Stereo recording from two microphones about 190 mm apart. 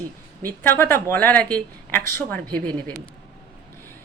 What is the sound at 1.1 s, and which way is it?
A woman's voice, 10° left (ahead or behind).